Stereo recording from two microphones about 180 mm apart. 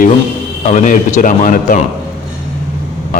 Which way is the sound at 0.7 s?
45° left (ahead or behind).